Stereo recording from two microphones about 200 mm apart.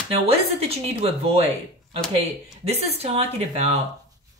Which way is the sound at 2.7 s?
30° right (ahead or behind).